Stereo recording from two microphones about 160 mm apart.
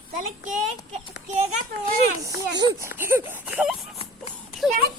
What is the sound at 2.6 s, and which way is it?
Speech, 20° right (ahead or behind).